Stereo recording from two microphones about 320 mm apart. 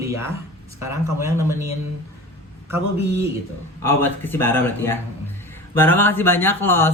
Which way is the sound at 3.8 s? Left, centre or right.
Centre.